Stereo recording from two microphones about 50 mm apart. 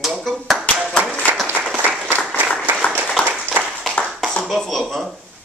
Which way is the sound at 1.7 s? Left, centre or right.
Right.